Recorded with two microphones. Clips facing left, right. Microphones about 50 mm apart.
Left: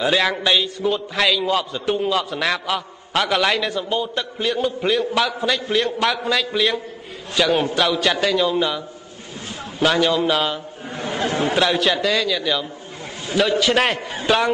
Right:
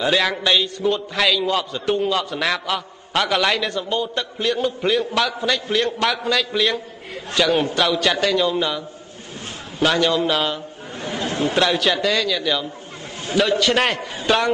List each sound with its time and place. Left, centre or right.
0.0 s a man's voice: centre
11.0 s chatter: left
11.5 s a man's voice: centre